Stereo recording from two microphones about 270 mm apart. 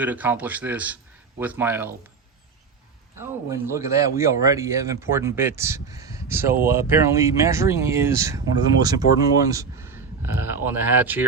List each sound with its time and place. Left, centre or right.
0.0 s speech: centre
3.2 s speech: centre